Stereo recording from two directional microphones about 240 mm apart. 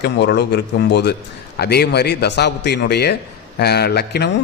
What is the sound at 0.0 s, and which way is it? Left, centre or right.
A man's voice, left.